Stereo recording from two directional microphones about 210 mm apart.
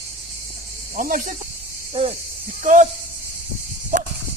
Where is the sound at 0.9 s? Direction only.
40° right (ahead or behind).